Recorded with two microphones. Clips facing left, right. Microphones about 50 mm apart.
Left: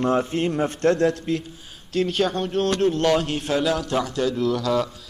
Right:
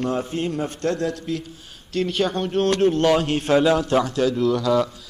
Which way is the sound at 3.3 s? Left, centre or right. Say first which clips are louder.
Right 5 dB; right.